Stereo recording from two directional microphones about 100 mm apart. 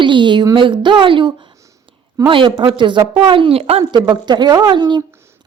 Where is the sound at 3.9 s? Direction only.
50° right (ahead or behind).